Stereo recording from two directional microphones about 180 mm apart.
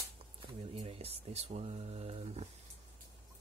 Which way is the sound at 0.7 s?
35° right (ahead or behind).